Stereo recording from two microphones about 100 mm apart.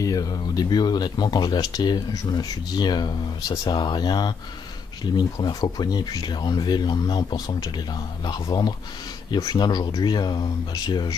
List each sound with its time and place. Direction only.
0.0 s speech: 35° left (ahead or behind)